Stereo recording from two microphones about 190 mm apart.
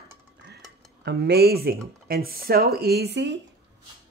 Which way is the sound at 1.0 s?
60° right (ahead or behind).